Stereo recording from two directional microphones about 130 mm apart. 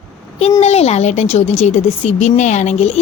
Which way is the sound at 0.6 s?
55° left (ahead or behind).